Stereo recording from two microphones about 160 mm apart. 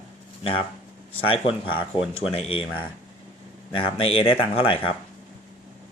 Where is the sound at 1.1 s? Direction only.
35° left (ahead or behind).